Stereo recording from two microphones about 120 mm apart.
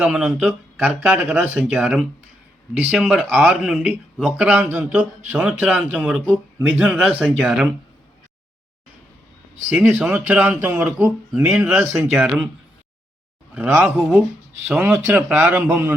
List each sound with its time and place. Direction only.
0.0 s speech: 5° right (ahead or behind)
9.6 s speech: 10° right (ahead or behind)
13.5 s speech: 10° right (ahead or behind)